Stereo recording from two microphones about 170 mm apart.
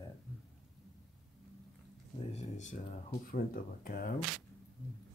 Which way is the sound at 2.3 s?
40° left (ahead or behind).